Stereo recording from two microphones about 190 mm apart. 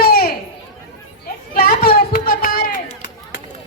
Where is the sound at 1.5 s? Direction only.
50° left (ahead or behind).